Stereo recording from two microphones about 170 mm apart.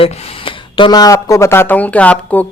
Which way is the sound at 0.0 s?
35° left (ahead or behind).